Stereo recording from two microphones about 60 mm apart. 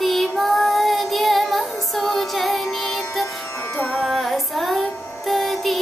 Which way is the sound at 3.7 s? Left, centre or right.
Left.